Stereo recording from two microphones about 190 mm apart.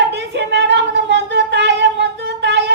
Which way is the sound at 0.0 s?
65° right (ahead or behind).